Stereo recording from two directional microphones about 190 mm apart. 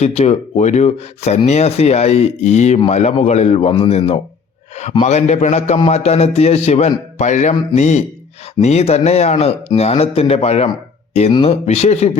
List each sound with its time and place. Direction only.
0.0 s a man's voice: 35° left (ahead or behind)